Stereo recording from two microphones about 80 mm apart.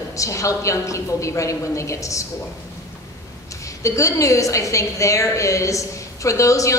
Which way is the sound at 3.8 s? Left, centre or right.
Left.